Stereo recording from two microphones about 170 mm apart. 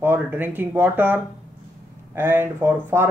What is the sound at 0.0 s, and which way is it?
Speech, 10° right (ahead or behind).